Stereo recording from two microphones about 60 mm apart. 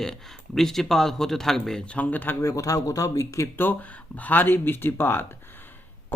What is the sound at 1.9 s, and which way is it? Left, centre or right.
Speech, left.